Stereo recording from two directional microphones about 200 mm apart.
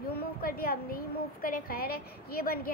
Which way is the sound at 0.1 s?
50° left (ahead or behind).